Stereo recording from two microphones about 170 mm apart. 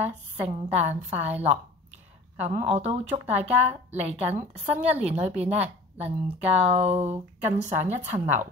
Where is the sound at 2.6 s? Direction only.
35° right (ahead or behind).